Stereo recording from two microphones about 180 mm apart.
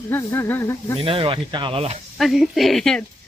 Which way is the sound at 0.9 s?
30° right (ahead or behind).